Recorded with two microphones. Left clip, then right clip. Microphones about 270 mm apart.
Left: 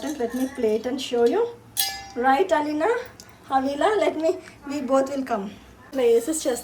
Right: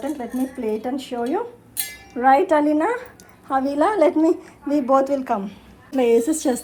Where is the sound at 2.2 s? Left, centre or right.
Right.